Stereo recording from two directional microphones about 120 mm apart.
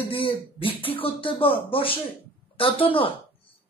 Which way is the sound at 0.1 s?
50° left (ahead or behind).